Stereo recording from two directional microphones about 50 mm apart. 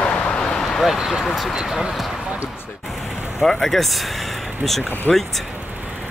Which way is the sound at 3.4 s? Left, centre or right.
Centre.